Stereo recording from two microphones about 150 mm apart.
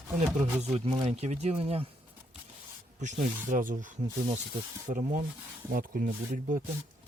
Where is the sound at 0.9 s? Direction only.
40° right (ahead or behind).